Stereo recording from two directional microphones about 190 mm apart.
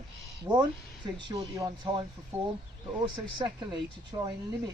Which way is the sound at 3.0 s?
25° right (ahead or behind).